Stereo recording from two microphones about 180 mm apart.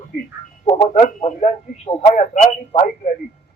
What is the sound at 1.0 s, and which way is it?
Radio, 40° left (ahead or behind).